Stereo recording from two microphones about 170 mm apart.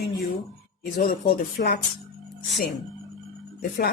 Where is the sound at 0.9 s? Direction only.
60° left (ahead or behind).